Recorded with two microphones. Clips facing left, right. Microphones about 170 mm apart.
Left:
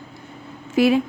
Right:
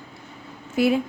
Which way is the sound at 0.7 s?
90° left.